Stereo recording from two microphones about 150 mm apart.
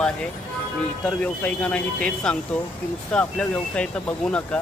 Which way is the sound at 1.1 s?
5° left (ahead or behind).